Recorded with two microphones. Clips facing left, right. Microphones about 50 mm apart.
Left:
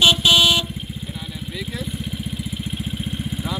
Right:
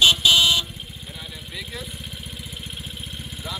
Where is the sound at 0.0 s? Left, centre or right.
Left.